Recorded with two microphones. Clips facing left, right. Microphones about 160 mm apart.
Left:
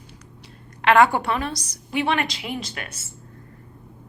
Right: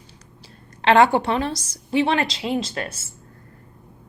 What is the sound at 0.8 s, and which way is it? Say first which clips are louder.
A woman's voice: right 1 dB; 30° right (ahead or behind).